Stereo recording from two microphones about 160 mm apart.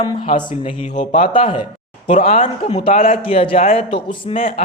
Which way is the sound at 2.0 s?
45° left (ahead or behind).